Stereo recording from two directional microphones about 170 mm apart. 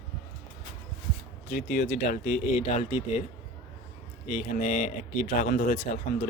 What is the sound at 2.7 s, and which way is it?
Speech, 40° left (ahead or behind).